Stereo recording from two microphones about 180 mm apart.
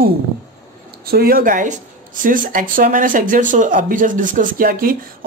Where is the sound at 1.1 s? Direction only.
55° right (ahead or behind).